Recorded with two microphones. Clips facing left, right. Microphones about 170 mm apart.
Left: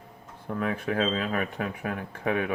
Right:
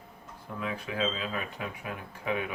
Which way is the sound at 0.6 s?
55° left (ahead or behind).